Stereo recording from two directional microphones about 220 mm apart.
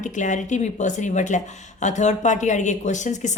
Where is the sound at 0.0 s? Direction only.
35° left (ahead or behind).